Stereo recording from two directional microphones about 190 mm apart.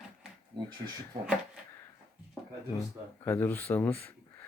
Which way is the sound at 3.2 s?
10° left (ahead or behind).